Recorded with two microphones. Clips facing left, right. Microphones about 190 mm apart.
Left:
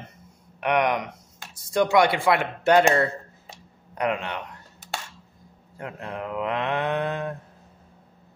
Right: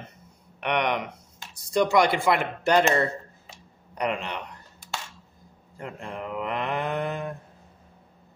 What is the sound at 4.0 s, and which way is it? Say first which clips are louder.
Mantra: left 2 dB; centre (ahead or behind).